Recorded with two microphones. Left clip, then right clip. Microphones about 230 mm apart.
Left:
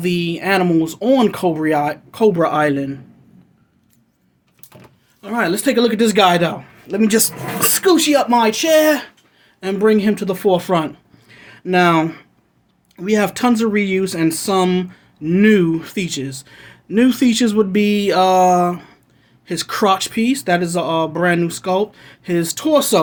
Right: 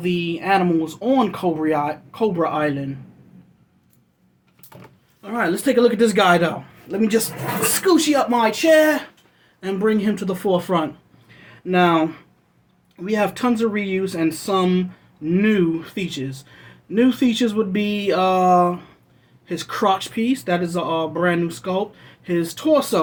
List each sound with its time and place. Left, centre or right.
0.0 s speech: left
5.2 s speech: left
6.9 s speech: left